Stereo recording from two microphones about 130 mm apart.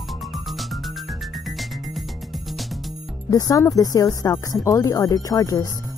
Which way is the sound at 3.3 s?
25° left (ahead or behind).